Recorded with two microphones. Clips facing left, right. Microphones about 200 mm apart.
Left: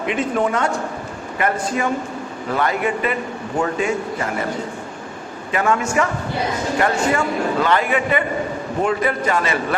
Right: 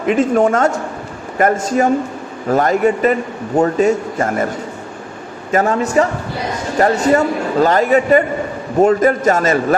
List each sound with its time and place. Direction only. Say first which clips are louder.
0.0 s a man's voice: right 7 dB; 45° right (ahead or behind)
5.5 s a man's voice: right 4 dB; 40° right (ahead or behind)
7.1 s a man's voice: right 5 dB; 40° right (ahead or behind)